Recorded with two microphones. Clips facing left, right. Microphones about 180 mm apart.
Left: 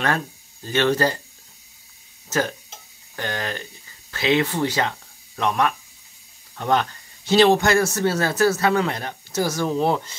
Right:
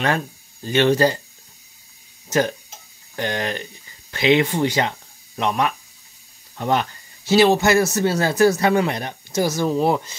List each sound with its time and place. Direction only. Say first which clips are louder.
0.7 s speech: right 3 dB; 15° right (ahead or behind)
3.2 s speech: right 4 dB; 20° right (ahead or behind)